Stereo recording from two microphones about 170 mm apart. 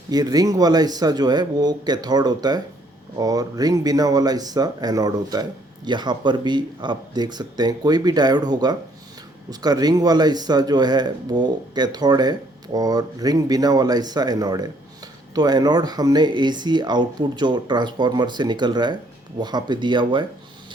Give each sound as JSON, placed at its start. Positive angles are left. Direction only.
{"t": 0.1, "sound": "speech", "side_deg": -20}